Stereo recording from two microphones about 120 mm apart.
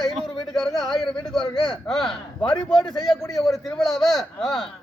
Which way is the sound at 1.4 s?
40° left (ahead or behind).